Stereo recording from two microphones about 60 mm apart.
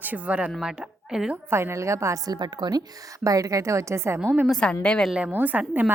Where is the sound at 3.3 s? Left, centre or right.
Right.